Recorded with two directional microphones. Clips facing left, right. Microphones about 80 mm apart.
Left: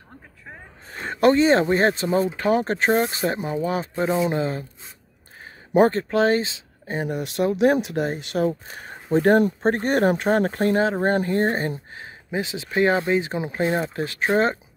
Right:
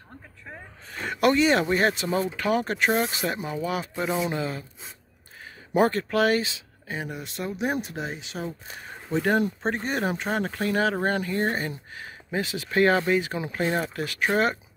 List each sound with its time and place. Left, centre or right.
0.8 s speech: left
5.8 s speech: left
6.9 s speech: left
8.0 s speech: left
8.6 s speech: left
10.7 s speech: left
12.3 s speech: left